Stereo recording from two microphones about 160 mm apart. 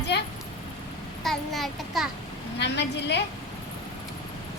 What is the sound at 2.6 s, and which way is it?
Speech, 90° left.